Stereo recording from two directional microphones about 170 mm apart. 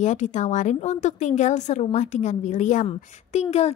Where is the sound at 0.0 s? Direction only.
45° left (ahead or behind).